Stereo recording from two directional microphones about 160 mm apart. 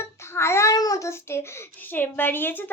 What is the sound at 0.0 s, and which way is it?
Child singing, 15° left (ahead or behind).